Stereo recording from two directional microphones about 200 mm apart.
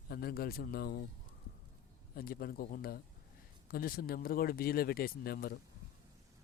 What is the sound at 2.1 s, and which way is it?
A man's voice, 50° left (ahead or behind).